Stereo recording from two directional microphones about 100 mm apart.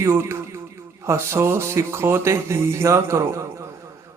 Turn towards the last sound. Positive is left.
turn(degrees=-30)  # may be behind; listen again after turning